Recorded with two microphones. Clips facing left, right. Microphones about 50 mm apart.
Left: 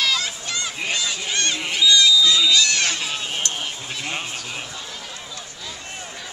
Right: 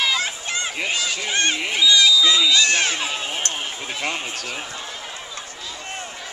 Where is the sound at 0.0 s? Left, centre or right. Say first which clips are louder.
Right 1 dB; right.